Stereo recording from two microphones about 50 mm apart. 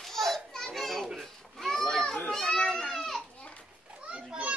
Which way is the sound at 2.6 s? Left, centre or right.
Centre.